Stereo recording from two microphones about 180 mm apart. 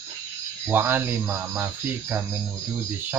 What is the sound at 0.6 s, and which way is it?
Speech, 10° right (ahead or behind).